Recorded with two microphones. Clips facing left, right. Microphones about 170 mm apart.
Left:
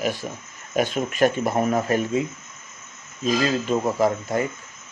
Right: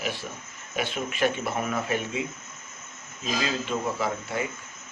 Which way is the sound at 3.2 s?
45° left (ahead or behind).